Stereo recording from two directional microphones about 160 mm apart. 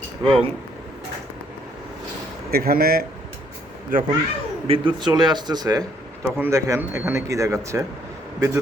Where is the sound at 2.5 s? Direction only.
70° right (ahead or behind).